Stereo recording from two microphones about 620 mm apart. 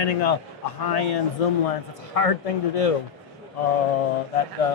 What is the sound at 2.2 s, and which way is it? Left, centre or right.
Speech, left.